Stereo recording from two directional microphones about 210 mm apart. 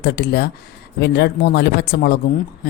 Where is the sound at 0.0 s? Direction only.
50° left (ahead or behind).